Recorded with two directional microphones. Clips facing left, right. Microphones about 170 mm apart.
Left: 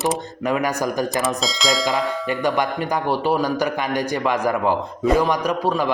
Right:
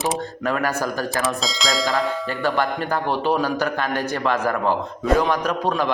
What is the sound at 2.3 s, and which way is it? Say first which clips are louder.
A man's voice: left 3 dB; 15° left (ahead or behind).